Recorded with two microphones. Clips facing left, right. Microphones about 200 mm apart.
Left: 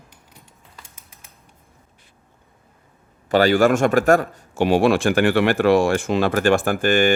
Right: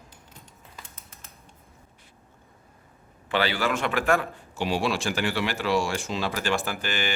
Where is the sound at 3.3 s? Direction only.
45° left (ahead or behind).